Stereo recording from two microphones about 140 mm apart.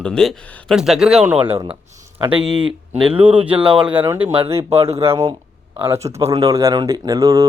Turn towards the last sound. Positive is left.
turn(degrees=-25)  # may be behind; listen again after turning